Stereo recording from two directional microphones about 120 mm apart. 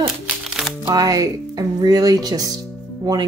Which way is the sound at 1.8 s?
30° right (ahead or behind).